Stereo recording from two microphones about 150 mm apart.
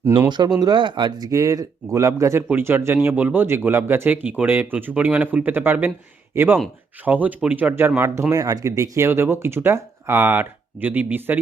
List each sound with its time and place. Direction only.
0.3 s speech: 30° right (ahead or behind); by 11.3 s 10° right (ahead or behind)